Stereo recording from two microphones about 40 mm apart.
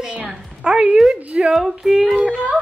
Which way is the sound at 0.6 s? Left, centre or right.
Centre.